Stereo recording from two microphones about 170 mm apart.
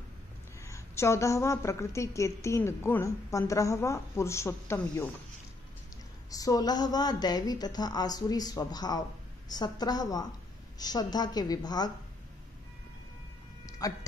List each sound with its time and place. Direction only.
0.7 s a woman's voice: 15° left (ahead or behind)
6.3 s a woman's voice: 20° left (ahead or behind)
13.7 s a sound: 20° left (ahead or behind)